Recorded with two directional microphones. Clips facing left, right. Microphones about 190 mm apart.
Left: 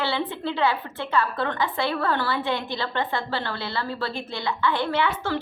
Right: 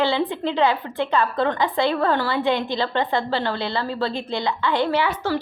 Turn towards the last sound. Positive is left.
turn(degrees=-10)  # may be behind; listen again after turning